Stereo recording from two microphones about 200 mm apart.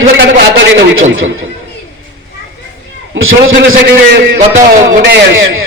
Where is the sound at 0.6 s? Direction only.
75° right (ahead or behind).